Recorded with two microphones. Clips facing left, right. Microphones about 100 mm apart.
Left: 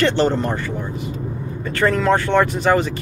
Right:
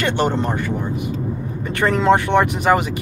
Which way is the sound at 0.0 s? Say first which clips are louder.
Left 2 dB; 15° right (ahead or behind).